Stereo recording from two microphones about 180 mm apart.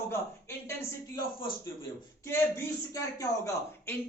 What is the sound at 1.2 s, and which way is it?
Speech, 25° left (ahead or behind).